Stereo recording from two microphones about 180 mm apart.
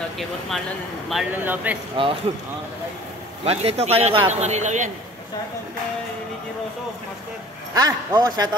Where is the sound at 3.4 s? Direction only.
35° right (ahead or behind).